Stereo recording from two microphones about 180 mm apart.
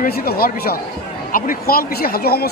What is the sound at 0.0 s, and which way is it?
Speech, 60° left (ahead or behind).